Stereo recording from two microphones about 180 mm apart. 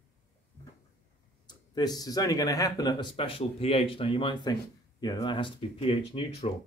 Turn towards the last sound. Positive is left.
turn(degrees=30)  # may be behind; listen again after turning